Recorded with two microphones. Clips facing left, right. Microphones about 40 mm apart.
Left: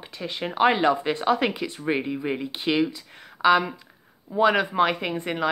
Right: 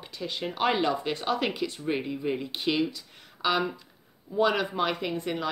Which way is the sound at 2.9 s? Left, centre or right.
Left.